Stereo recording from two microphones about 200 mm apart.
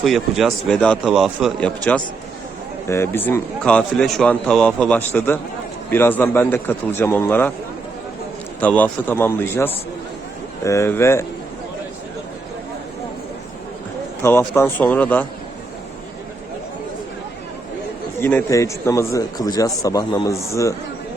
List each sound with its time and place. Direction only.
0.0 s a man's voice: centre (ahead or behind)
8.6 s speech: 10° left (ahead or behind)
14.2 s speech: 10° left (ahead or behind)
18.2 s speech: 10° left (ahead or behind)